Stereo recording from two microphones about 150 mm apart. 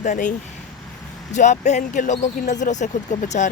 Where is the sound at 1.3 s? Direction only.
55° left (ahead or behind).